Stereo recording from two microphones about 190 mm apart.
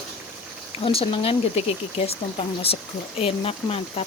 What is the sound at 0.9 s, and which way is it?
Speech, 30° left (ahead or behind).